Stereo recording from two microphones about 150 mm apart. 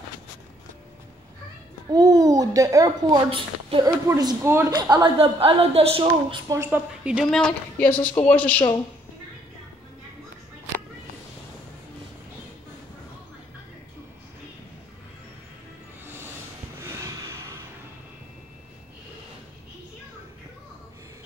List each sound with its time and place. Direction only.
1.9 s a child's voice: 25° right (ahead or behind)
3.3 s a woman's voice: 35° right (ahead or behind)
4.1 s speech: 20° right (ahead or behind)
5.2 s a woman's voice: 40° right (ahead or behind)
6.5 s speech: 20° right (ahead or behind)
7.1 s a woman's voice: 5° right (ahead or behind)
7.3 s a woman's voice: 10° left (ahead or behind)
16.8 s a sound: 20° right (ahead or behind)